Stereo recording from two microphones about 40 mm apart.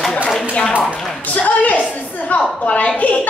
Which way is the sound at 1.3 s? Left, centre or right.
Left.